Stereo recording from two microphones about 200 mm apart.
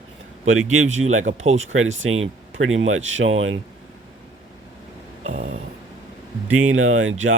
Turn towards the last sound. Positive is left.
turn(degrees=-85)